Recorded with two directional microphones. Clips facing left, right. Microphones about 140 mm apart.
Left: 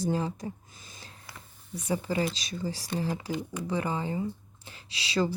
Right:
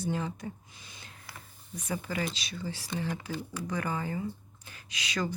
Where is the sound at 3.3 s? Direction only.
20° left (ahead or behind).